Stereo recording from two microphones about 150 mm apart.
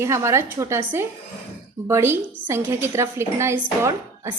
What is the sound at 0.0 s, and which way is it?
A woman's voice, 20° right (ahead or behind).